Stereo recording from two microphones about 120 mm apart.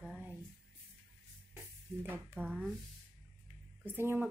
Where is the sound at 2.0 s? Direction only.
15° right (ahead or behind).